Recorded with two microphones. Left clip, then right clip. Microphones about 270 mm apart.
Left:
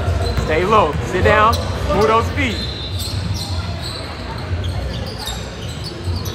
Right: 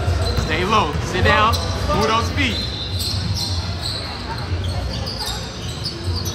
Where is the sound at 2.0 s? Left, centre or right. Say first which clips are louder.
Left 4 dB; centre.